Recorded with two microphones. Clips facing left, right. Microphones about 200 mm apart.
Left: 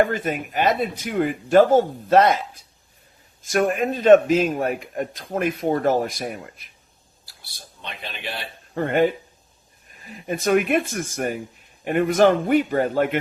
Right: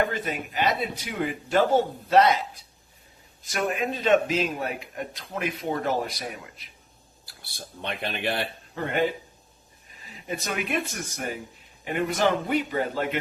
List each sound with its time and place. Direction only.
0.0 s a man's voice: 50° left (ahead or behind)
7.3 s speech: 55° right (ahead or behind)
8.7 s a man's voice: 50° left (ahead or behind)